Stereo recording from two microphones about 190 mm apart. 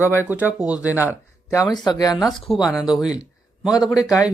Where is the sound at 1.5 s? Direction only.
20° left (ahead or behind).